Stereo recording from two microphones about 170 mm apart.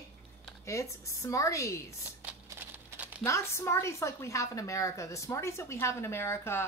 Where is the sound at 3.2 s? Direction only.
15° left (ahead or behind).